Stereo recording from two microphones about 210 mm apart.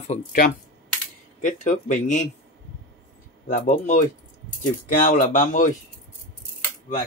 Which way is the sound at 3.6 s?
35° left (ahead or behind).